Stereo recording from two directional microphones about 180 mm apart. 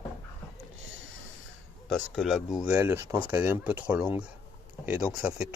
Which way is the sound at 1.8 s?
5° left (ahead or behind).